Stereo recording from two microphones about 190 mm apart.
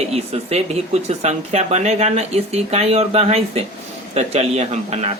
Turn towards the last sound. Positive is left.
turn(degrees=-35)  # may be behind; listen again after turning